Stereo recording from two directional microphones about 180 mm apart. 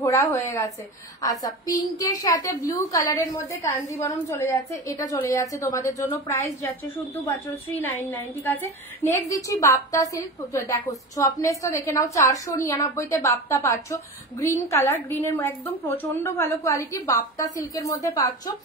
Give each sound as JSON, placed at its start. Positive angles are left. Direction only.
{"t": 0.0, "sound": "a woman's voice", "side_deg": 15}
{"t": 9.1, "sound": "a woman's voice", "side_deg": 15}